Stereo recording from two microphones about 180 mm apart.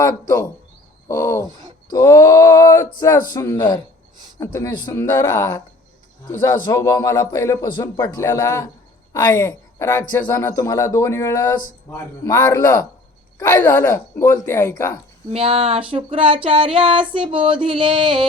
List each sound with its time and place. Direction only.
0.0 s speech: 20° left (ahead or behind)
15.3 s speech: 30° right (ahead or behind)
15.9 s a sound: 30° right (ahead or behind)